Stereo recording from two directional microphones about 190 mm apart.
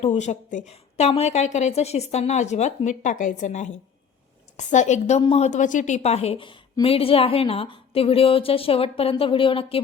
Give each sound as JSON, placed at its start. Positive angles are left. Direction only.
{"t": 0.0, "sound": "a woman's voice", "side_deg": 35}